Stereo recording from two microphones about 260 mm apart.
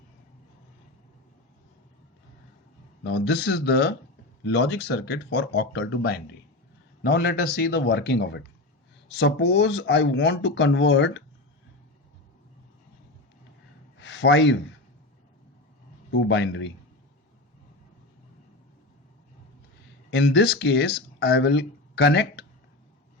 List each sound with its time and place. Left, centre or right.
3.0 s speech: left
14.0 s a man's voice: left
16.3 s speech: left
20.1 s speech: left